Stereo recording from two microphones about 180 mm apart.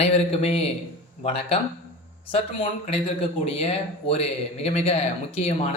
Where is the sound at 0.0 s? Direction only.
35° left (ahead or behind).